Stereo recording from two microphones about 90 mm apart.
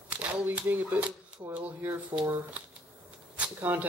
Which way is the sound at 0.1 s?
15° right (ahead or behind).